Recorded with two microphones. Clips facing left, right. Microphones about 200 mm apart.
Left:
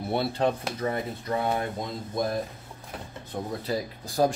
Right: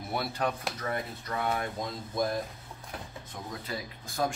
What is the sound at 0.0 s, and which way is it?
Speech, 30° left (ahead or behind).